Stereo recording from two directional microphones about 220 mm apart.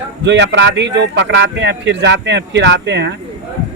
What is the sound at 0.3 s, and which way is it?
Speech, 50° right (ahead or behind).